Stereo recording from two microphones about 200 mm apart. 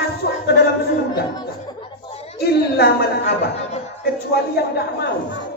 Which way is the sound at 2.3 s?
50° left (ahead or behind).